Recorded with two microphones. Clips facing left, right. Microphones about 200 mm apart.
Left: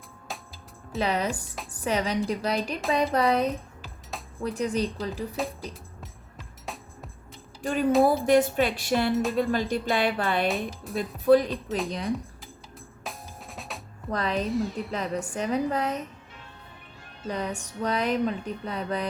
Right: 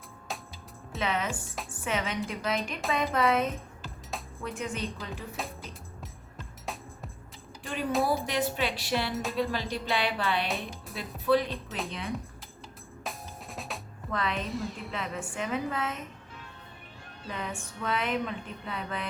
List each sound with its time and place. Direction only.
0.3 s music: centre (ahead or behind)
0.9 s music: 35° left (ahead or behind)
4.1 s music: centre (ahead or behind)
4.4 s music: 35° left (ahead or behind)
5.4 s music: centre (ahead or behind)
7.6 s speech: 45° left (ahead or behind)
10.5 s speech: centre (ahead or behind)
11.3 s speech: 45° left (ahead or behind)
11.9 s music: 40° left (ahead or behind)
13.1 s drum: centre (ahead or behind)
14.1 s music: 40° left (ahead or behind)
14.4 s speech: centre (ahead or behind)
15.2 s music: 40° left (ahead or behind)
17.2 s music: 40° left (ahead or behind)